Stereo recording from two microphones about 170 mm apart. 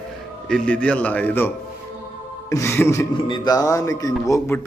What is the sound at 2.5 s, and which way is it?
Speech, 15° left (ahead or behind).